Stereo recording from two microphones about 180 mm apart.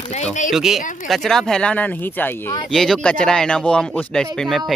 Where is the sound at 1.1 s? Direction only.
Centre (ahead or behind).